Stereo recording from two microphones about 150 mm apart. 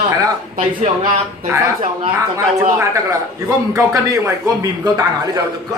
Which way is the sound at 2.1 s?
20° right (ahead or behind).